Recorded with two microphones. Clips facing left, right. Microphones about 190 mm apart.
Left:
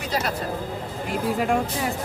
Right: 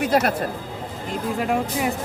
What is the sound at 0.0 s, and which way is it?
Speech, 55° right (ahead or behind).